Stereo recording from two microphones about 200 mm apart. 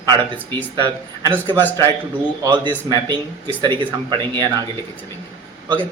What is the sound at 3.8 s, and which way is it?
Speech, 25° right (ahead or behind).